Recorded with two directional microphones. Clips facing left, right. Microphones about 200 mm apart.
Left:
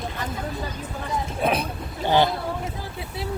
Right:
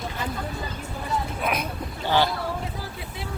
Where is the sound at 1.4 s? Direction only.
30° left (ahead or behind).